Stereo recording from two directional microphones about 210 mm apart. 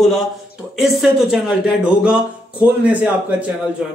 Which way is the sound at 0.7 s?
Centre (ahead or behind).